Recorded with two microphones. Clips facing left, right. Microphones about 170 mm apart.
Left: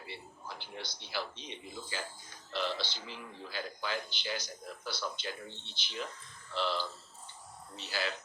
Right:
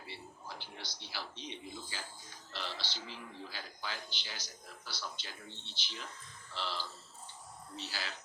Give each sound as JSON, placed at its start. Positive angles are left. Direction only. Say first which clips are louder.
{"t": 0.6, "sound": "a man's voice", "louder": "left 4 dB", "side_deg": 55}